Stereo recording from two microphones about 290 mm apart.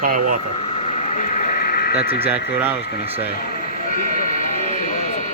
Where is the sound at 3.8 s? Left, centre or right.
Left.